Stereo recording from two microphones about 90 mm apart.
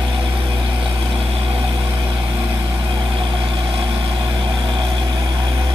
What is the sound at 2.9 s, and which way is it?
Vehicle, 60° right (ahead or behind).